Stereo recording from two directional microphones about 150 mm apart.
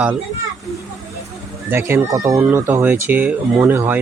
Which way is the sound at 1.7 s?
15° right (ahead or behind).